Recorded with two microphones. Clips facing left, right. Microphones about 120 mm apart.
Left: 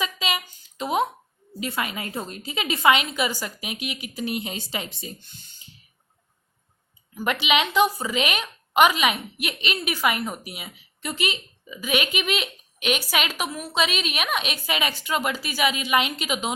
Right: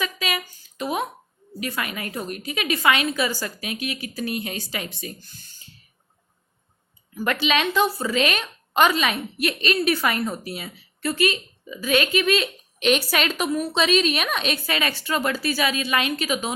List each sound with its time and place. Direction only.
0.0 s a sound: 25° left (ahead or behind)
1.5 s a woman's voice: 25° left (ahead or behind)
7.1 s a woman's voice: 15° left (ahead or behind)